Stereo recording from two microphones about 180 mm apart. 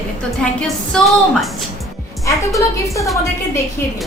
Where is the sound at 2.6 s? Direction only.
15° left (ahead or behind).